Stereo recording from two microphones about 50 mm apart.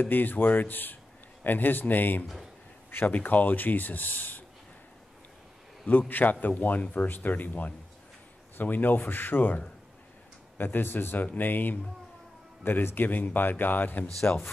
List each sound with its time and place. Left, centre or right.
0.0 s speech: left
5.9 s speech: left
10.6 s speech: left